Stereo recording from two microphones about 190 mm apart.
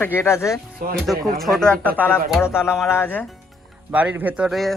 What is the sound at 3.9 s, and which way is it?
Speech, 10° right (ahead or behind).